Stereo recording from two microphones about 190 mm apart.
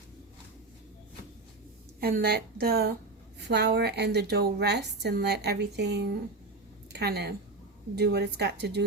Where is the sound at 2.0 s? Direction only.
50° right (ahead or behind).